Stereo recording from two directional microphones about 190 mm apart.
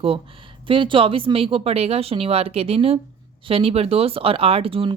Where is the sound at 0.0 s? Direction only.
30° right (ahead or behind).